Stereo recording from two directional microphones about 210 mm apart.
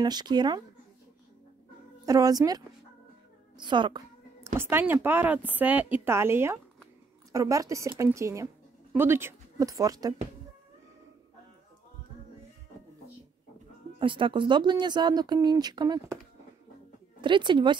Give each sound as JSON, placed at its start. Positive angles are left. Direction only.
{"t": 0.0, "sound": "speech", "side_deg": -20}
{"t": 2.0, "sound": "a woman's voice", "side_deg": -15}
{"t": 4.6, "sound": "speech", "side_deg": -10}
{"t": 13.9, "sound": "speech", "side_deg": -25}
{"t": 17.2, "sound": "speech", "side_deg": -20}